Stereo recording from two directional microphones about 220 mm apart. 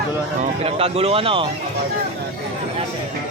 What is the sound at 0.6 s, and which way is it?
Speech, 25° right (ahead or behind).